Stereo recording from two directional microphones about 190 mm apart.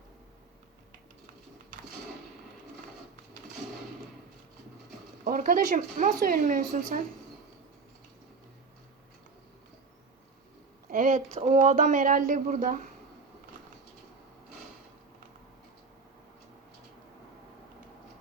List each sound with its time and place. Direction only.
5.2 s speech: 45° right (ahead or behind)
10.9 s speech: 45° right (ahead or behind)